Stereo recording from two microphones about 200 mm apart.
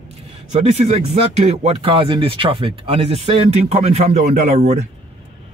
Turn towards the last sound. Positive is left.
turn(degrees=-35)  # may be behind; listen again after turning